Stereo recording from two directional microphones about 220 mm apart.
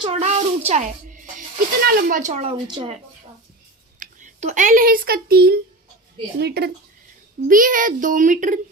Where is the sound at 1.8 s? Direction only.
40° right (ahead or behind); by 2.9 s 20° right (ahead or behind).